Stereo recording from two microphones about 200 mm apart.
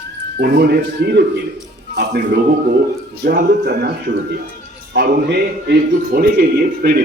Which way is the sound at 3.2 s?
50° right (ahead or behind).